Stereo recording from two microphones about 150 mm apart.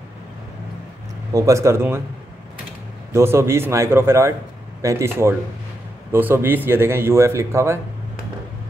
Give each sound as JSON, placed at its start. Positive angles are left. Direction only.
{"t": 1.3, "sound": "speech", "side_deg": -20}
{"t": 3.1, "sound": "speech", "side_deg": -20}